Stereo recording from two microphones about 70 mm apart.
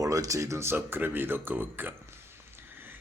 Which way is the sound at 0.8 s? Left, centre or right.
Right.